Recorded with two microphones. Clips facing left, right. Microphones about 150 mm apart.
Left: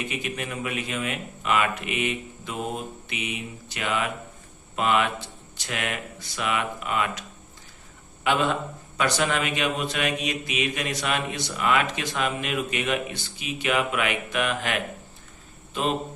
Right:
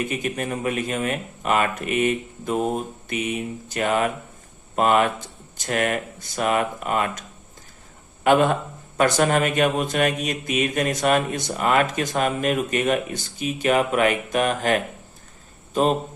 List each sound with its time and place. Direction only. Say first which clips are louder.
0.0 s speech: right 5 dB; 45° right (ahead or behind)